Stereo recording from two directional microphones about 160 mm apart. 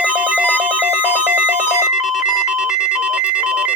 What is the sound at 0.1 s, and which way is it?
Telephone bell ringing, 10° right (ahead or behind).